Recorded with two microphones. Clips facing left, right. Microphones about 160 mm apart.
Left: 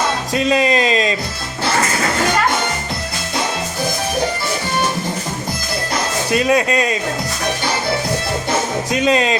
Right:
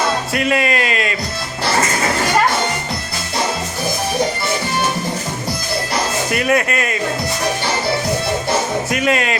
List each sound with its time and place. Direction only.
0.3 s speech: 25° left (ahead or behind)
6.3 s speech: 20° left (ahead or behind)
8.9 s speech: 25° left (ahead or behind)